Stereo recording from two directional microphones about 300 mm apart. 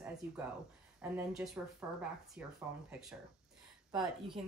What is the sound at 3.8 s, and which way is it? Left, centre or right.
Speech, centre.